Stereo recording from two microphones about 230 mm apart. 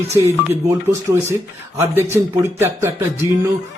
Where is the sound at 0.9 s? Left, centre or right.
Centre.